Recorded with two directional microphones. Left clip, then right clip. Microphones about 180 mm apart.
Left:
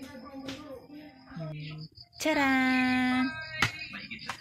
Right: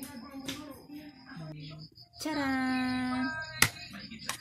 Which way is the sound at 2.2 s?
25° left (ahead or behind).